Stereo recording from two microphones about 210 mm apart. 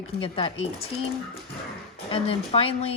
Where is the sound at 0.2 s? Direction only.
25° left (ahead or behind).